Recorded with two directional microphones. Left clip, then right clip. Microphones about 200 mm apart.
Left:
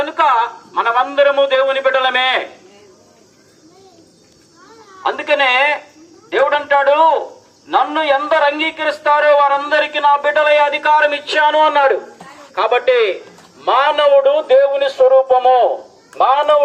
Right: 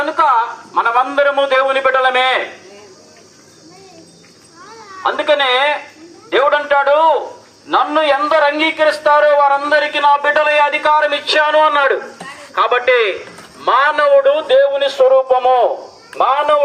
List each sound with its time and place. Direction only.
0.0 s a man's voice: 10° left (ahead or behind)
5.0 s a man's voice: 25° left (ahead or behind)